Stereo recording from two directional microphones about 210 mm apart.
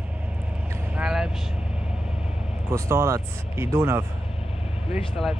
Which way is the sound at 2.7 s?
15° right (ahead or behind).